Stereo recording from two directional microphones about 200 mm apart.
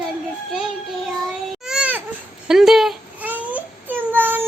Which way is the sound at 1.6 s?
5° right (ahead or behind).